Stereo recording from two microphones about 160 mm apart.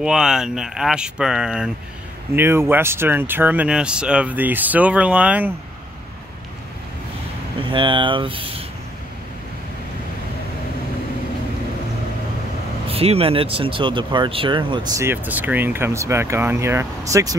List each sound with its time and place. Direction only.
0.0 s speech: 5° right (ahead or behind)
2.3 s speech: 15° right (ahead or behind)
7.6 s speech: 30° right (ahead or behind)
12.8 s speech: 40° right (ahead or behind)
15.0 s speech: 15° right (ahead or behind)